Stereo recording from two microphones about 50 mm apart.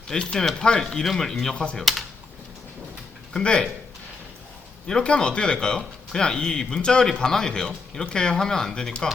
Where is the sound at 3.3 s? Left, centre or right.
Centre.